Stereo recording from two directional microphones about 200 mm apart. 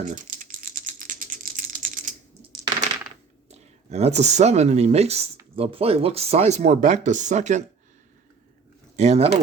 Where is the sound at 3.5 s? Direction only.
30° right (ahead or behind).